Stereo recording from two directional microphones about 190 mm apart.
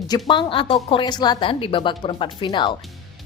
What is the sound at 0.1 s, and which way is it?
A woman's voice, 25° left (ahead or behind).